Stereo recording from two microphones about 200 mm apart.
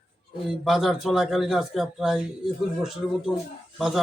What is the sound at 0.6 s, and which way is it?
A man's voice, centre (ahead or behind).